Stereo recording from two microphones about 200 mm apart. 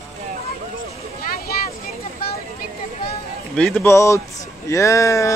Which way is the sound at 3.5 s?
5° left (ahead or behind).